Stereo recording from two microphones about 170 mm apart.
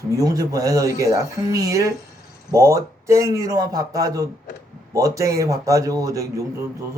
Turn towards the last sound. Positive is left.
turn(degrees=-20)  # may be behind; listen again after turning